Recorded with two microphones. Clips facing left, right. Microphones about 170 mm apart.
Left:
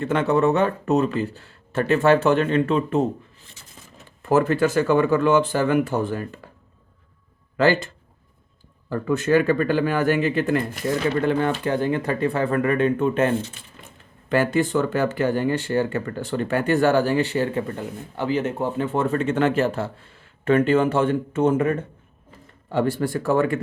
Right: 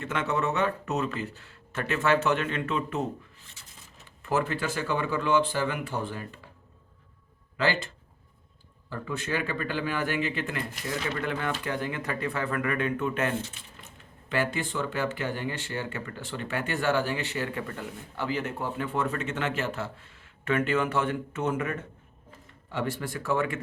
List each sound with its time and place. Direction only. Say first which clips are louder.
0.0 s speech: left 9 dB; 35° left (ahead or behind)
4.2 s speech: left 10 dB; 40° left (ahead or behind)
7.5 s speech: left 9 dB; 45° left (ahead or behind)
8.9 s speech: left 12 dB; 45° left (ahead or behind)
11.1 s speech: left 9 dB; 30° left (ahead or behind)
13.5 s speech: left 4 dB; 45° left (ahead or behind)